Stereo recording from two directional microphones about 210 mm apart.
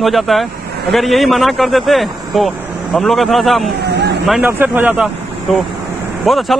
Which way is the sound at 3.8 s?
55° right (ahead or behind).